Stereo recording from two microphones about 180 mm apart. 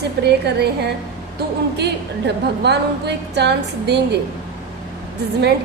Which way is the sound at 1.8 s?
70° right (ahead or behind).